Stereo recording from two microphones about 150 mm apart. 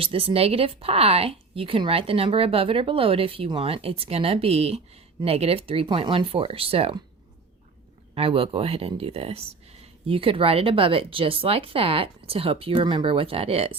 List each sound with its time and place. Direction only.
0.0 s speech: 40° right (ahead or behind)
8.1 s speech: 40° right (ahead or behind)